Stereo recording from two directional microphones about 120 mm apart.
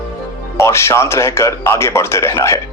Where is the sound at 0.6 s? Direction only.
20° left (ahead or behind).